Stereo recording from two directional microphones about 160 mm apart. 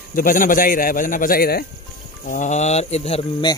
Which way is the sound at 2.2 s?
50° left (ahead or behind).